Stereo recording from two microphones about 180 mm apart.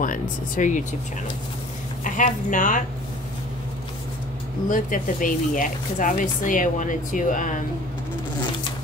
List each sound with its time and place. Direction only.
0.0 s speech: 45° left (ahead or behind)
2.0 s speech: 45° left (ahead or behind)
4.6 s speech: 50° left (ahead or behind)